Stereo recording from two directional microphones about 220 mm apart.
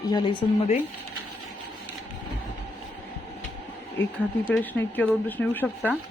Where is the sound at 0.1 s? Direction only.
20° left (ahead or behind).